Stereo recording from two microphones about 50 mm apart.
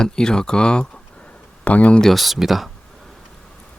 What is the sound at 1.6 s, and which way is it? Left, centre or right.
Speech, left.